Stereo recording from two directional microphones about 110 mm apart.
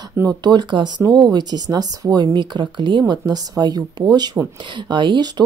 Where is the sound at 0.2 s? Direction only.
40° right (ahead or behind).